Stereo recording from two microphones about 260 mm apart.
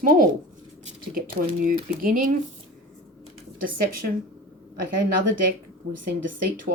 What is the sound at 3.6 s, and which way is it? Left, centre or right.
A woman's voice, right.